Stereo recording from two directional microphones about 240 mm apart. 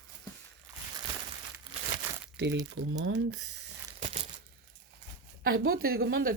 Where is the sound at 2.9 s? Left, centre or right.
Right.